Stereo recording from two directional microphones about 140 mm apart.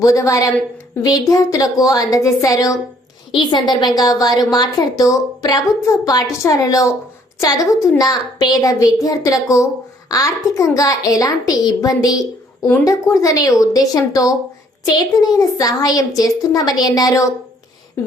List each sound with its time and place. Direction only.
0.0 s a woman's voice: 25° left (ahead or behind)